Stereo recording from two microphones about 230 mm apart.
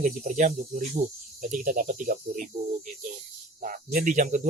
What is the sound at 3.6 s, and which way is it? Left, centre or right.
Speech, right.